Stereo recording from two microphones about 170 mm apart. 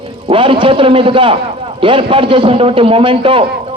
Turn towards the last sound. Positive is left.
turn(degrees=-30)  # may be behind; listen again after turning